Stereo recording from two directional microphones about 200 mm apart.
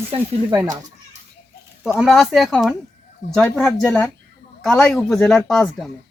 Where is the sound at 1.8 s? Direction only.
5° right (ahead or behind).